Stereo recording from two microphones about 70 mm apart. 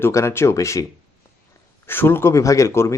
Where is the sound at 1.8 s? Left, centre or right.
Left.